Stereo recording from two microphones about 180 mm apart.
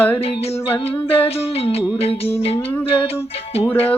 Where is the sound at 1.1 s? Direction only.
30° left (ahead or behind).